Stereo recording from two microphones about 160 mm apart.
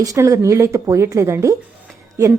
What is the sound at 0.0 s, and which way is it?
A woman's voice, 20° right (ahead or behind).